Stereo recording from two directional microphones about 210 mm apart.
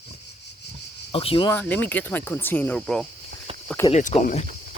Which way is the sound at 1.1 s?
25° left (ahead or behind).